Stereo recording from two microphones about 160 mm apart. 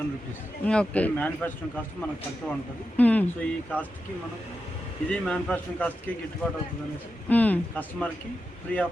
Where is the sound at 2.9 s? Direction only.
10° left (ahead or behind).